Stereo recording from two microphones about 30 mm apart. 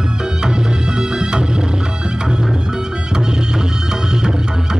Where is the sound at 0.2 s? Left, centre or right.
Right.